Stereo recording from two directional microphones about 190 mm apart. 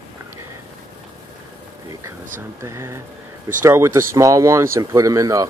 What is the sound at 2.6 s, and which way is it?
Speech, 15° right (ahead or behind).